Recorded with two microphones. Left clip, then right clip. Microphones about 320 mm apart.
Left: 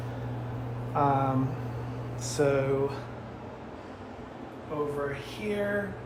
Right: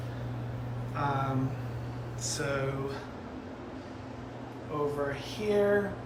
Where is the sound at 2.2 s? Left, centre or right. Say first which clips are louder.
Left 6 dB; centre.